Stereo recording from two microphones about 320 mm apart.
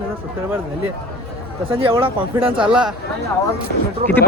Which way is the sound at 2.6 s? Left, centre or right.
Centre.